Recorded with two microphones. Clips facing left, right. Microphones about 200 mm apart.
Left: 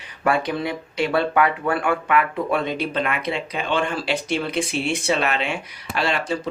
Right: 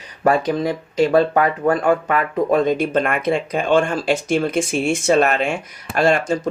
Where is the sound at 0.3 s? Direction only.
40° right (ahead or behind).